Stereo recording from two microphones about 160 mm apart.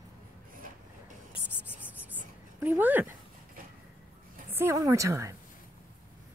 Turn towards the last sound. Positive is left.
turn(degrees=-20)  # may be behind; listen again after turning